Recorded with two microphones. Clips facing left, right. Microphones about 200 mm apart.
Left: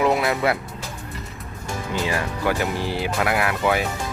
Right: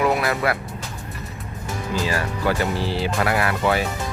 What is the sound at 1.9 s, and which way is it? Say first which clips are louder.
Speech: right 1 dB; 20° left (ahead or behind).